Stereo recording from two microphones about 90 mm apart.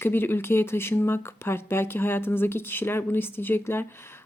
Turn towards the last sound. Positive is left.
turn(degrees=25)  # may be behind; listen again after turning